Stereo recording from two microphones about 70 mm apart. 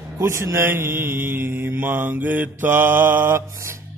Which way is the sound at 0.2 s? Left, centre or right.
Right.